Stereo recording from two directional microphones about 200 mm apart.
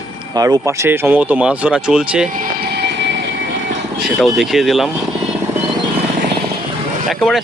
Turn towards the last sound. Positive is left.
turn(degrees=0)  # may be behind; listen again after turning